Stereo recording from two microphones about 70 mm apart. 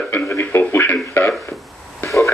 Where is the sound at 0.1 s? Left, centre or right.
Left.